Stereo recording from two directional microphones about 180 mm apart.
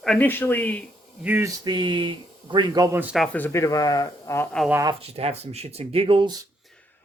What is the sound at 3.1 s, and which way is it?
Speech, 5° left (ahead or behind).